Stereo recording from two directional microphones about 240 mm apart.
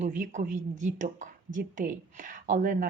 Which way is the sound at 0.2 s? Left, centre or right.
Right.